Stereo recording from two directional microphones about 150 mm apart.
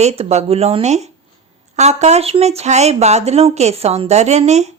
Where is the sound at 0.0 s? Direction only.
45° right (ahead or behind).